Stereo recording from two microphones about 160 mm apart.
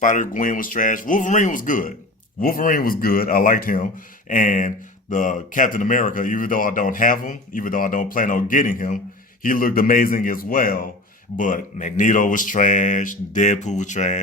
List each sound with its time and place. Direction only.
0.0 s speech: 55° left (ahead or behind)